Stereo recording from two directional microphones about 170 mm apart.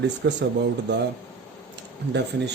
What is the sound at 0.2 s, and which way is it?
Speech, 75° right (ahead or behind).